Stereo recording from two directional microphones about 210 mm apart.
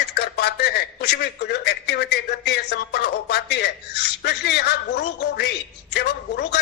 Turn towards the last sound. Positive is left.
turn(degrees=55)  # may be behind; listen again after turning